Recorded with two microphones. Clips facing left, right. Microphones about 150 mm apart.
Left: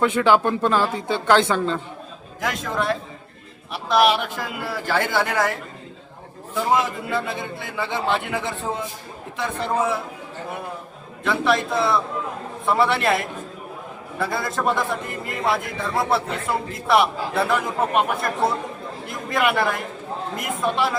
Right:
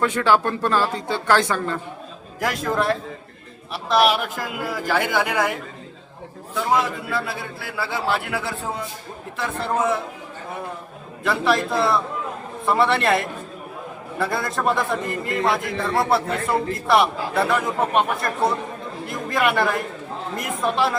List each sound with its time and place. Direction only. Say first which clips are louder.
0.0 s speech: left 1 dB; 15° left (ahead or behind)
2.4 s a man's voice: right 3 dB; centre (ahead or behind)
6.5 s a man's voice: even; centre (ahead or behind)
11.2 s a man's voice: even; centre (ahead or behind)